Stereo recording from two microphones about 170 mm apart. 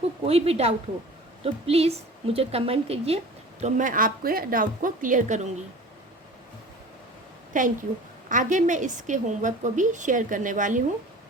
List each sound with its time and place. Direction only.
0.3 s a woman's voice: 35° right (ahead or behind)
3.6 s a woman's voice: 50° right (ahead or behind)
7.5 s a woman's voice: 50° right (ahead or behind)